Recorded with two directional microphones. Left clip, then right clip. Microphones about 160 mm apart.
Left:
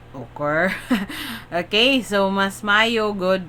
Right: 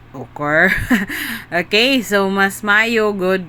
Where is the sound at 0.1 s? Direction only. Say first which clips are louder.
Right 5 dB; 25° right (ahead or behind).